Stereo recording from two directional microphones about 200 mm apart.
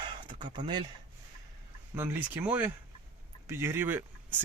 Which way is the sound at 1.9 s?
10° right (ahead or behind).